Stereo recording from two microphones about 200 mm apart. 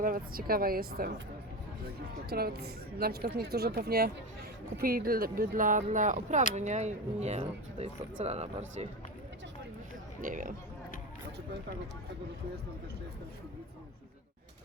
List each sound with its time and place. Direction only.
0.0 s speech: 45° right (ahead or behind)
2.3 s speech: 50° right (ahead or behind); by 8.9 s 30° right (ahead or behind)
10.2 s speech: 45° right (ahead or behind)